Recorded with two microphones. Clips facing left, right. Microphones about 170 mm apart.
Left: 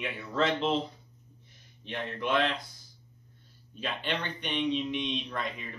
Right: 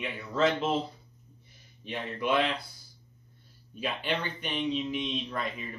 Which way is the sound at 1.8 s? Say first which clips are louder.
Right 2 dB; 10° right (ahead or behind).